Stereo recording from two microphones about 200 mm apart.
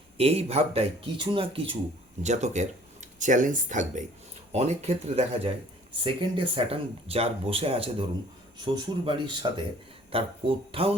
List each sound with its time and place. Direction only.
0.2 s speech: 30° right (ahead or behind)